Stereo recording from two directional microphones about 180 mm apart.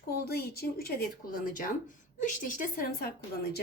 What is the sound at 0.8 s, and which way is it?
A woman's voice, 55° left (ahead or behind).